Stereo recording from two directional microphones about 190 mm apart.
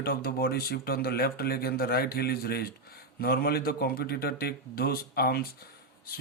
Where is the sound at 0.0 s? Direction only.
55° left (ahead or behind).